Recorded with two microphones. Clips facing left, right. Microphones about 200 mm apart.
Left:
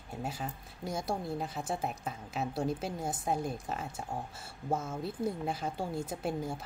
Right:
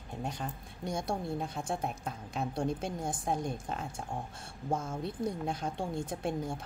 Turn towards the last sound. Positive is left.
turn(degrees=5)  # may be behind; listen again after turning